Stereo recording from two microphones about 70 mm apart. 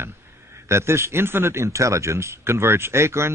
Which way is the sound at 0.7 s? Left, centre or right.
Right.